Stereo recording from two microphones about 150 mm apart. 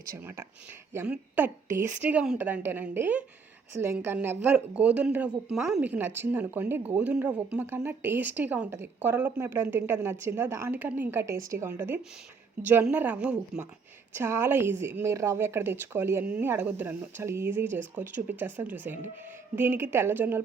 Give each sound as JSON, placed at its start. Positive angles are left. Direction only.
{"t": 0.2, "sound": "a woman's voice", "side_deg": -15}